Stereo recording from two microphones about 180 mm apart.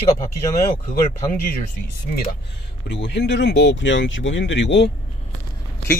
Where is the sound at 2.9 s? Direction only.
70° left (ahead or behind).